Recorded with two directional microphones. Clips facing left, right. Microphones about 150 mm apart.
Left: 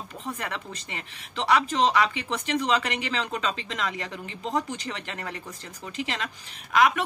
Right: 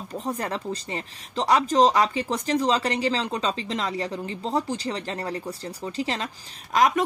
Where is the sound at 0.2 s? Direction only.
35° right (ahead or behind).